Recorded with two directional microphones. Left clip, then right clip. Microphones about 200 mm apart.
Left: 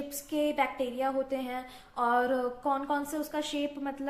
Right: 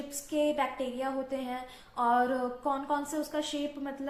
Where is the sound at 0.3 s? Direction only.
35° left (ahead or behind).